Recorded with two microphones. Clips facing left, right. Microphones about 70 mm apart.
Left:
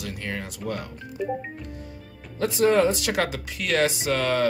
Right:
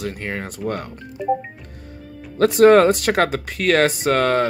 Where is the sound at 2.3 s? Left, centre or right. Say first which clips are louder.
Right 9 dB; right.